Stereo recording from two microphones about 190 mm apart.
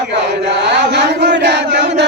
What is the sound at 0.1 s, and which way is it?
Chant, 65° right (ahead or behind).